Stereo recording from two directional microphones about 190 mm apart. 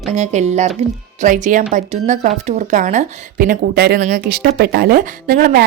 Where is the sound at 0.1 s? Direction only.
35° right (ahead or behind).